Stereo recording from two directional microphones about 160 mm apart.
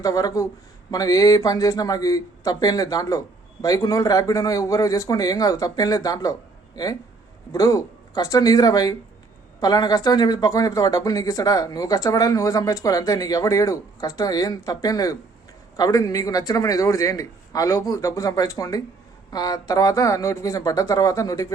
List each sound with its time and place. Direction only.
0.0 s speech: 20° left (ahead or behind)